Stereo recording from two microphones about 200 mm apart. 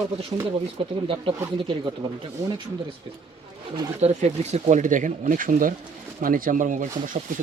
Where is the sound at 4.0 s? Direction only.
35° right (ahead or behind).